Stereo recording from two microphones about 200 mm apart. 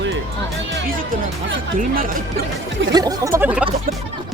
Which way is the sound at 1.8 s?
45° right (ahead or behind).